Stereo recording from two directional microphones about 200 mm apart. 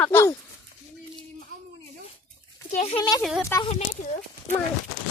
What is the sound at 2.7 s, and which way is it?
Speech, 35° left (ahead or behind).